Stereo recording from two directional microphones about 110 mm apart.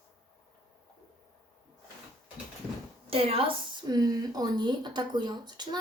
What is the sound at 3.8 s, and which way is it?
Speech, 35° right (ahead or behind).